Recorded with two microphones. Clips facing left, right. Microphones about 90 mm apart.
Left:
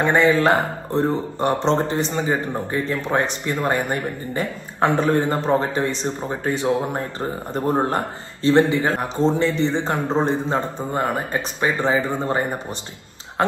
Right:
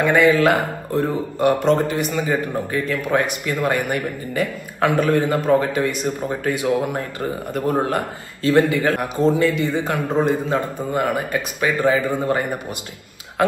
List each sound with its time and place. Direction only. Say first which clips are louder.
0.0 s a man's voice: right 2 dB; 25° left (ahead or behind)